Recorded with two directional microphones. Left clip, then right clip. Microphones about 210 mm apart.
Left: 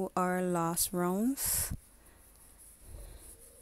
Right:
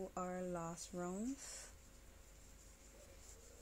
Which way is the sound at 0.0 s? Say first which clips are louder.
Left 13 dB; 50° left (ahead or behind).